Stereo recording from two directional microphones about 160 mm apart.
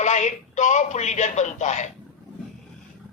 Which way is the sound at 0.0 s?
45° left (ahead or behind).